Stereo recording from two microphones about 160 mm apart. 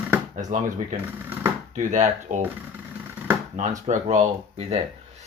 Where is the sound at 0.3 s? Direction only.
50° right (ahead or behind).